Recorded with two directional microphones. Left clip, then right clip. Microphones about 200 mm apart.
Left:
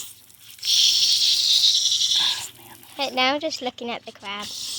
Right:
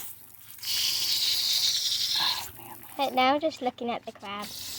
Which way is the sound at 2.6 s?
Centre (ahead or behind).